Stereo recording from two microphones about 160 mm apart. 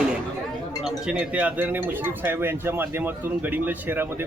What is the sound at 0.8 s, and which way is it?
Speech, 5° right (ahead or behind).